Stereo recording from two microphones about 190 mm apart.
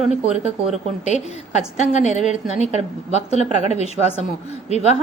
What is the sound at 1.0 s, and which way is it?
A woman's voice, 35° left (ahead or behind).